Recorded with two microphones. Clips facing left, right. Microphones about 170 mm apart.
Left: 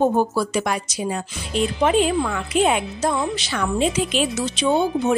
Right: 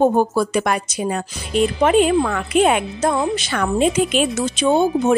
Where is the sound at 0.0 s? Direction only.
45° right (ahead or behind).